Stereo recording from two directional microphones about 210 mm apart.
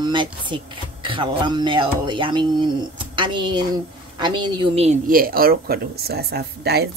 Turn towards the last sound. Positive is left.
turn(degrees=-50)  # may be behind; listen again after turning